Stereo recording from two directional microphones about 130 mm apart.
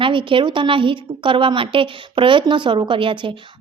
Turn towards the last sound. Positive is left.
turn(degrees=-40)  # may be behind; listen again after turning